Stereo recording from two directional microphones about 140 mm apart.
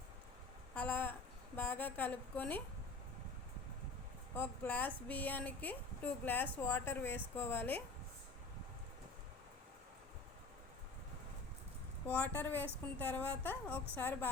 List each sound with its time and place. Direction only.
0.8 s speech: 10° left (ahead or behind)
4.4 s speech: 15° left (ahead or behind)
12.0 s speech: 10° left (ahead or behind)